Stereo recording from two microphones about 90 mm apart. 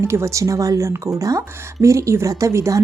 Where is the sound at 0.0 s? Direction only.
30° right (ahead or behind).